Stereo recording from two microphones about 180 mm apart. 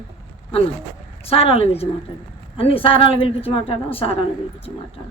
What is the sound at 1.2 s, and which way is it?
Speech, 30° left (ahead or behind).